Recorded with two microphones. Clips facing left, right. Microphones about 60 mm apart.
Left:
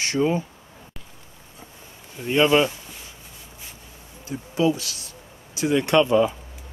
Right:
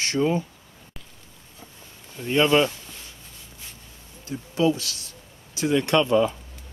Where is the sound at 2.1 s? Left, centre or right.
Left.